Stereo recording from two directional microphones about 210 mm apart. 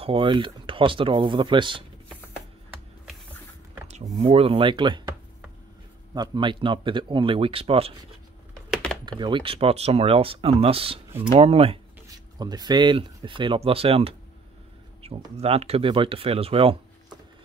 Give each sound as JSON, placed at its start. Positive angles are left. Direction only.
{"t": 0.0, "sound": "speech", "side_deg": -25}
{"t": 4.2, "sound": "speech", "side_deg": -25}
{"t": 6.1, "sound": "speech", "side_deg": -20}
{"t": 9.2, "sound": "speech", "side_deg": -25}